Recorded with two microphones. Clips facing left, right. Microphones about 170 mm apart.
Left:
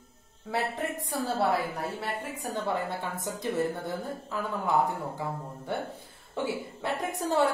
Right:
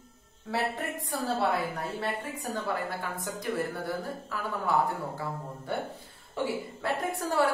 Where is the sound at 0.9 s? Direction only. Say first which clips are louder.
Left 1 dB; centre (ahead or behind).